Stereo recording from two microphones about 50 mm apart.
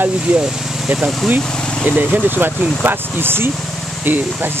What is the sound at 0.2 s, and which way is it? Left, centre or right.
Speech, centre.